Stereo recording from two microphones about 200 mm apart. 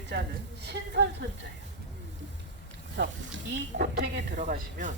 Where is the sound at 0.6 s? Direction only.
60° right (ahead or behind).